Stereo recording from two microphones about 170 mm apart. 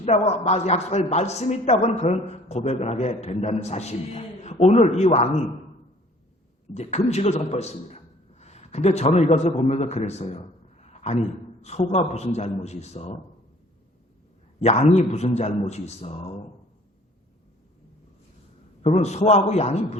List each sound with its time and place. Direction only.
0.0 s a man's voice: 40° left (ahead or behind)
6.7 s a man's voice: 40° left (ahead or behind)
14.6 s a man's voice: 40° left (ahead or behind)
18.9 s a man's voice: 40° left (ahead or behind)